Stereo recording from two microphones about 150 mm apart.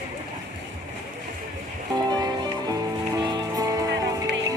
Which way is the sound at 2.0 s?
25° right (ahead or behind).